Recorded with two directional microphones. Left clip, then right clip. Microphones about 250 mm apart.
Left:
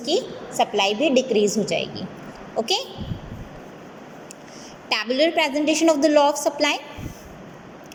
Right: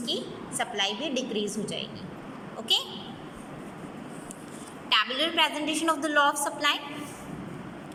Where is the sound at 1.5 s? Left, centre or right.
Centre.